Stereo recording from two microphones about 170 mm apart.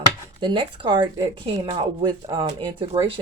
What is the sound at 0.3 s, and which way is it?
Speech, 30° right (ahead or behind).